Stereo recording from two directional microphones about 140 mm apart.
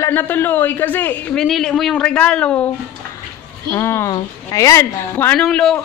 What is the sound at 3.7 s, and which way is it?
Speech, 20° left (ahead or behind).